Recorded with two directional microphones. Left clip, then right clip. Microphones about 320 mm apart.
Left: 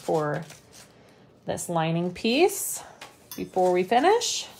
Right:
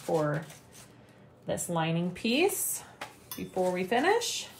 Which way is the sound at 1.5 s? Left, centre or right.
Left.